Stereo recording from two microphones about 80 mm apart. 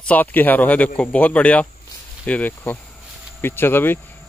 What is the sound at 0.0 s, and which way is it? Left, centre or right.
Speech, left.